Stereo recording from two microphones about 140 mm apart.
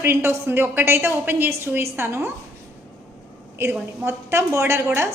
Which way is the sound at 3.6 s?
20° right (ahead or behind).